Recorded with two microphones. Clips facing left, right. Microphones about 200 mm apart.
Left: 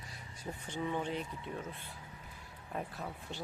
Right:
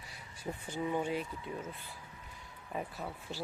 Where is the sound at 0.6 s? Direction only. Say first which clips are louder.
Right 2 dB; 10° right (ahead or behind).